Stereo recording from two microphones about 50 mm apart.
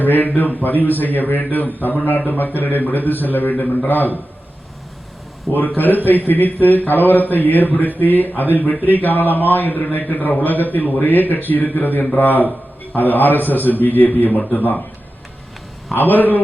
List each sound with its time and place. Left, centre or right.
0.0 s speech: left
5.5 s speech: left
16.0 s speech: left